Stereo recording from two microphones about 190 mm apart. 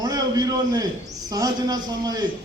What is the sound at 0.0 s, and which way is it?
A man's voice, 20° right (ahead or behind).